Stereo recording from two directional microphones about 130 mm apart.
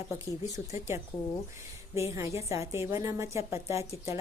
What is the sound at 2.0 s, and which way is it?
A woman's voice, 20° right (ahead or behind).